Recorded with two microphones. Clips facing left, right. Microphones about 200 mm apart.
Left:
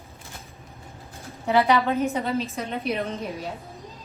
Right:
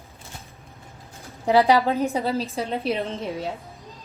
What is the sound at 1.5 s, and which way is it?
A woman's voice, 35° right (ahead or behind).